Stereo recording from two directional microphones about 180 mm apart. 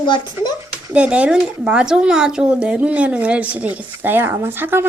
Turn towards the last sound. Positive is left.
turn(degrees=-10)  # may be behind; listen again after turning